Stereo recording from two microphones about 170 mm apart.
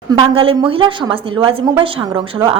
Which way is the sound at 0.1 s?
30° right (ahead or behind).